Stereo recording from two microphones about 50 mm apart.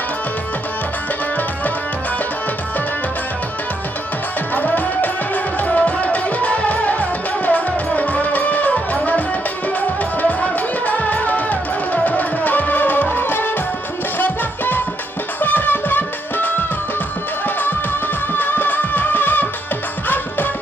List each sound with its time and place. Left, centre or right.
4.5 s music: left
18.3 s music: left